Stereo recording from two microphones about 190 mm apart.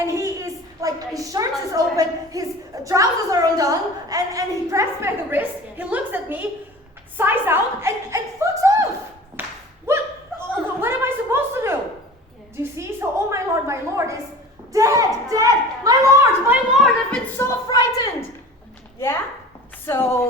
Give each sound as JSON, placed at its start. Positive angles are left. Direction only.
{"t": 0.0, "sound": "a woman's voice", "side_deg": -15}
{"t": 9.4, "sound": "thump", "side_deg": -15}
{"t": 10.8, "sound": "a sound", "side_deg": -10}
{"t": 12.7, "sound": "a woman's voice", "side_deg": -15}
{"t": 16.7, "sound": "speech", "side_deg": 0}
{"t": 17.3, "sound": "a woman's voice", "side_deg": 15}